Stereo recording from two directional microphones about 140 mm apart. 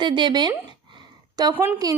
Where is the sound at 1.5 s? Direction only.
15° right (ahead or behind).